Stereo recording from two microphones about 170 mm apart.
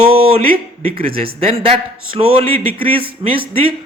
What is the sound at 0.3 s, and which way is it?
A man's voice, 35° right (ahead or behind).